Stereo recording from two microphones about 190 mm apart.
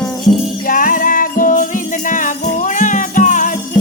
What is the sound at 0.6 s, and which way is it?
Music, 45° left (ahead or behind).